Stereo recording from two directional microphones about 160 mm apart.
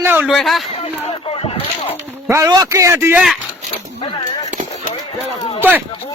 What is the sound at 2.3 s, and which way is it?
Speech, 20° right (ahead or behind).